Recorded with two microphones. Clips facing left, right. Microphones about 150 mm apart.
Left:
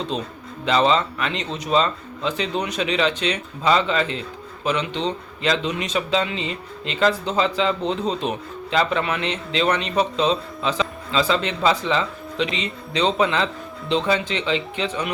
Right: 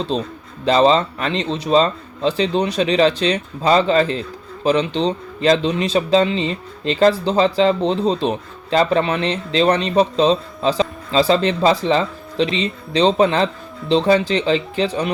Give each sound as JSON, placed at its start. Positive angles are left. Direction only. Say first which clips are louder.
{"t": 0.1, "sound": "a man's voice", "louder": "right 5 dB", "side_deg": -35}